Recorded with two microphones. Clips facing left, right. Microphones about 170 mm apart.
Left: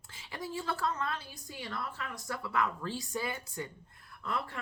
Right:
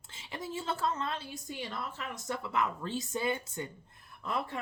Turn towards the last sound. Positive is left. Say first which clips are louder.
# right 2 dB
turn(degrees=-20)  # may be behind; listen again after turning